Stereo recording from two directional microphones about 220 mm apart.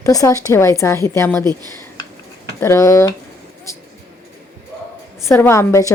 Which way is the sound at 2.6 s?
15° left (ahead or behind).